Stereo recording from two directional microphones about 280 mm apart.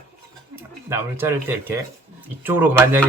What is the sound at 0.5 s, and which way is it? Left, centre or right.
Speech, centre.